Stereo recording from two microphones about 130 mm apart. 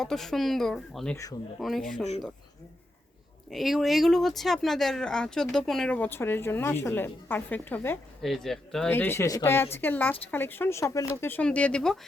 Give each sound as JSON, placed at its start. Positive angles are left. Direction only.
{"t": 0.0, "sound": "speech", "side_deg": 5}
{"t": 1.1, "sound": "speech", "side_deg": 25}
{"t": 1.5, "sound": "speech", "side_deg": 5}
{"t": 3.5, "sound": "speech", "side_deg": 0}
{"t": 8.2, "sound": "speech", "side_deg": 0}
{"t": 8.9, "sound": "speech", "side_deg": 15}